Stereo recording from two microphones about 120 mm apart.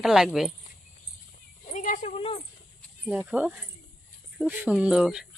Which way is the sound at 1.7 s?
90° left.